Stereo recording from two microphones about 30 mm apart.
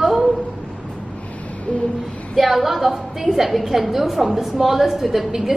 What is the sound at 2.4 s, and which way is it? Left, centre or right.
A woman's voice, centre.